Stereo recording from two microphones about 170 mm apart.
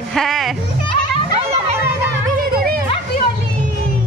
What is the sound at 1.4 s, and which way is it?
Children playing, 35° right (ahead or behind).